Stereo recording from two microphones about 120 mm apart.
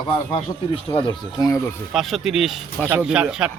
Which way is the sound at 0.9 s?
35° left (ahead or behind).